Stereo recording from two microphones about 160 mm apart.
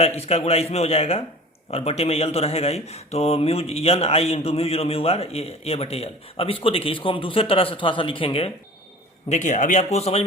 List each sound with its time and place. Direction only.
0.0 s speech: 40° left (ahead or behind)
9.3 s speech: 50° left (ahead or behind)